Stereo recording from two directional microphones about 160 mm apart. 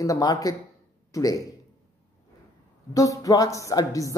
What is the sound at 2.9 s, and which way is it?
Speech, 20° left (ahead or behind).